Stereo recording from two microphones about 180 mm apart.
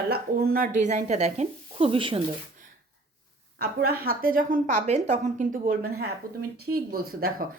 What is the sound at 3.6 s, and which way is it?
A woman's voice, 55° right (ahead or behind).